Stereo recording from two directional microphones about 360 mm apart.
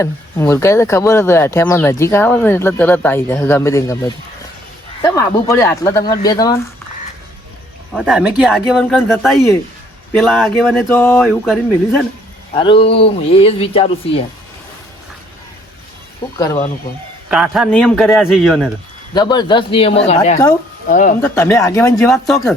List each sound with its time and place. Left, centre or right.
0.0 s speech: centre
7.9 s speech: centre
12.5 s speech: centre
16.4 s speech: centre
17.2 s speech: centre
19.1 s speech: centre
21.2 s speech: centre